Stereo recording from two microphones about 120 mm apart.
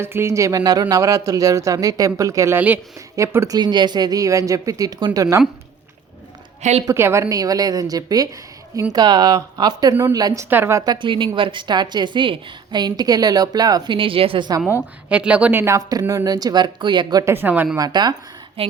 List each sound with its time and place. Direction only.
0.0 s speech: 20° right (ahead or behind)
2.6 s speech: 15° right (ahead or behind)
3.2 s speech: 25° right (ahead or behind)
6.6 s a woman's voice: 70° right (ahead or behind)
6.8 s a woman's voice: 20° right (ahead or behind)
10.8 s a woman's voice: 40° right (ahead or behind)
14.7 s speech: 15° right (ahead or behind)
15.6 s a woman's voice: 30° right (ahead or behind)
17.2 s speech: 15° right (ahead or behind)
17.7 s a woman's voice: 35° right (ahead or behind)
18.6 s speech: 50° right (ahead or behind)